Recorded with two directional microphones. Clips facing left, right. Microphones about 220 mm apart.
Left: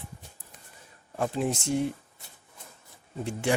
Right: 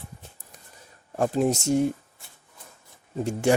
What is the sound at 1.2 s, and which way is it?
Speech, 40° right (ahead or behind).